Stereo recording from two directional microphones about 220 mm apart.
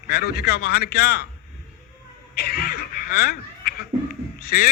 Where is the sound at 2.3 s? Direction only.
45° left (ahead or behind).